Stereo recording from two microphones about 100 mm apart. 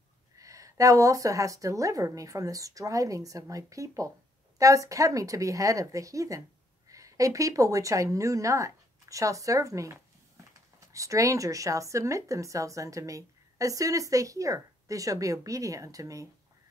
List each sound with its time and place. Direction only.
0.4 s a woman's voice: 35° right (ahead or behind)